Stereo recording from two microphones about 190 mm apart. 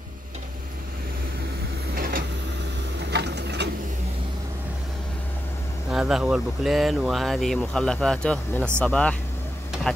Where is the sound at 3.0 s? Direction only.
65° right (ahead or behind).